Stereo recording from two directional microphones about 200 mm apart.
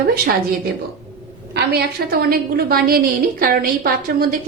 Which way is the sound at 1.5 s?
50° right (ahead or behind).